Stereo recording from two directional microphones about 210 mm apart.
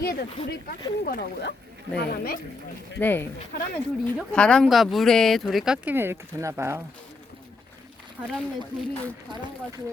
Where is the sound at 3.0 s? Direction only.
10° left (ahead or behind).